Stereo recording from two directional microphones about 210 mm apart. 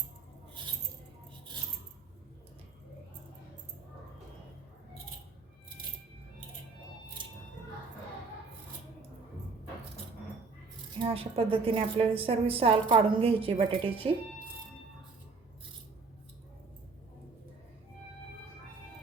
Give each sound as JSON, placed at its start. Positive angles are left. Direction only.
{"t": 11.0, "sound": "a woman's voice", "side_deg": -25}